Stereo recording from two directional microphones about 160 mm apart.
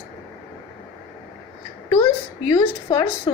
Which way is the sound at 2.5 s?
25° left (ahead or behind).